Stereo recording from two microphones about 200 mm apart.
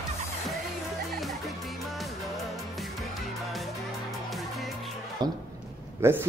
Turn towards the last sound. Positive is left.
turn(degrees=-15)  # may be behind; listen again after turning